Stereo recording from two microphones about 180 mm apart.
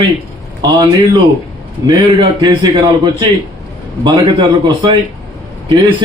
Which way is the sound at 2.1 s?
25° right (ahead or behind).